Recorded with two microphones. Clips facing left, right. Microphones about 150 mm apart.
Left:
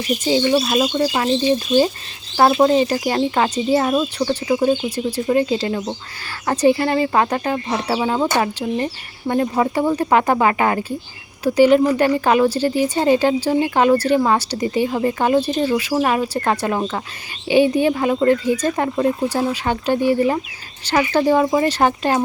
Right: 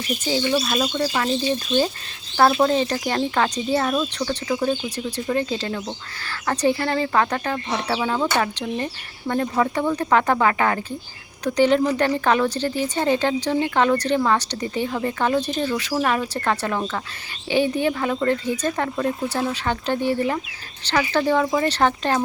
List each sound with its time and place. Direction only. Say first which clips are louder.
0.5 s speech: left 5 dB; 35° left (ahead or behind)
0.8 s speech: left 4 dB; 20° left (ahead or behind)
3.9 s speech: left 5 dB; 25° left (ahead or behind)
5.1 s speech: left 6 dB; 10° left (ahead or behind)
7.7 s speech: left 2 dB; 10° left (ahead or behind)
8.0 s speech: left 3 dB; 20° left (ahead or behind)